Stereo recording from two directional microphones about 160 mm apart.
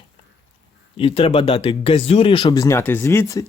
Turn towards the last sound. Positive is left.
turn(degrees=20)  # may be behind; listen again after turning